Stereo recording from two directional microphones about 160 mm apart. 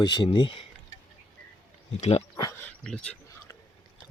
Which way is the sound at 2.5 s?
5° left (ahead or behind).